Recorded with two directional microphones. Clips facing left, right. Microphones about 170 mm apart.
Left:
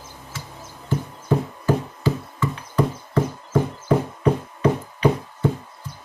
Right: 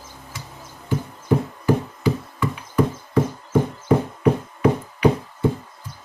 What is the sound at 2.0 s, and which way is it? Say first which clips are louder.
Music: right 1 dB; 15° right (ahead or behind).